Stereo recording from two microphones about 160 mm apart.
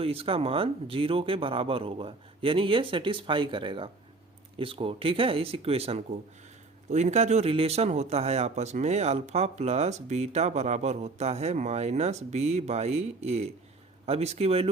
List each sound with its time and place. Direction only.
0.0 s speech: 35° right (ahead or behind)